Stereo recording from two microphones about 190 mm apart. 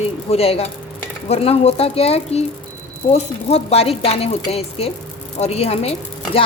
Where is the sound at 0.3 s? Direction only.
30° left (ahead or behind).